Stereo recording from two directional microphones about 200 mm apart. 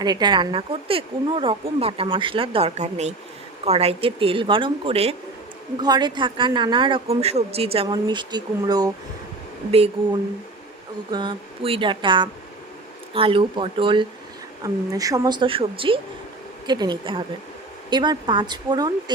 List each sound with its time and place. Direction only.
0.0 s speech: 20° right (ahead or behind)
9.7 s speech: 30° right (ahead or behind)